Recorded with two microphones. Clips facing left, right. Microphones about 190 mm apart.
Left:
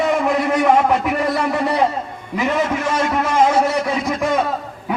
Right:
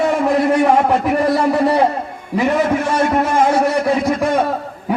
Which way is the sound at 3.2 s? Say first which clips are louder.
Left 1 dB; 55° right (ahead or behind).